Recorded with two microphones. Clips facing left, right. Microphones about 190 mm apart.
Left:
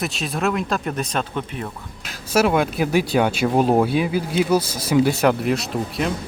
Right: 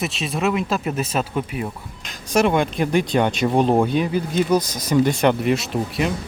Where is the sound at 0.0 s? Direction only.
Centre (ahead or behind).